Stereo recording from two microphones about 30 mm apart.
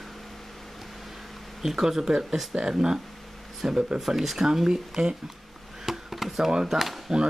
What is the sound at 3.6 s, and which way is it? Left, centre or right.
Speech, centre.